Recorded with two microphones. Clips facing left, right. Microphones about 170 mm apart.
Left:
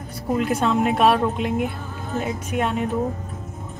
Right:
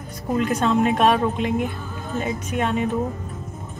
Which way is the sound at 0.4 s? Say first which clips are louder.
Right 1 dB; centre (ahead or behind).